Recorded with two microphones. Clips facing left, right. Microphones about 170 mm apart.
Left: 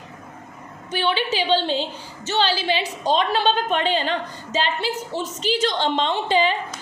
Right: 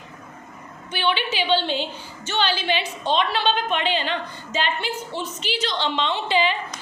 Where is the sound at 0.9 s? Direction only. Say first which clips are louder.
Left 2 dB; 40° left (ahead or behind).